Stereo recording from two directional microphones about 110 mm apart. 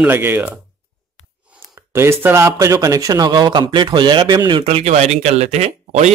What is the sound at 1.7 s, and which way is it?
A man's voice, 25° right (ahead or behind).